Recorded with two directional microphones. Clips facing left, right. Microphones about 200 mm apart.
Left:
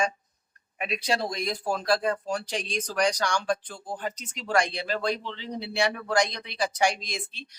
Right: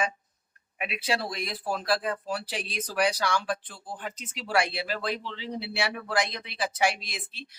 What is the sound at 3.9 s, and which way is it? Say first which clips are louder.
Speech: left 4 dB; 40° left (ahead or behind).